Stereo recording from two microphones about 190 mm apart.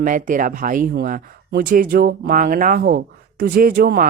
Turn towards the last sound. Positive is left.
turn(degrees=-50)  # may be behind; listen again after turning